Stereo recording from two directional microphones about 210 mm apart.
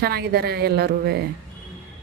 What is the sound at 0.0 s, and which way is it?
Speech, 50° right (ahead or behind).